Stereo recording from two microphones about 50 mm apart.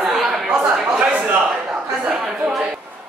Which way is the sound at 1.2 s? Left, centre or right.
Right.